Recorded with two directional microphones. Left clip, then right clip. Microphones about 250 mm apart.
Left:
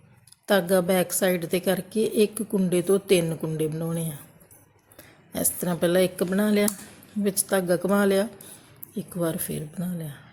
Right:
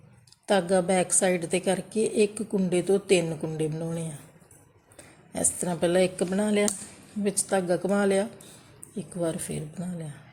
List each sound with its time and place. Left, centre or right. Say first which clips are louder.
0.4 s a woman's voice: left 2 dB; centre